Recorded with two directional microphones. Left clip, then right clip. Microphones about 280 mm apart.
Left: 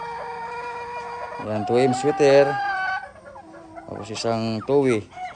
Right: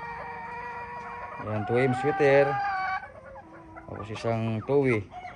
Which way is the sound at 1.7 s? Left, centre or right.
Centre.